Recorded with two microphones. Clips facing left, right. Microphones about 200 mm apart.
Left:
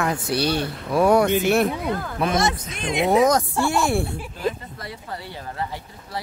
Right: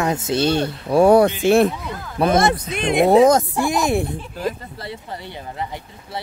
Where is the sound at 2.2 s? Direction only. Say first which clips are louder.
Right 7 dB; 55° right (ahead or behind).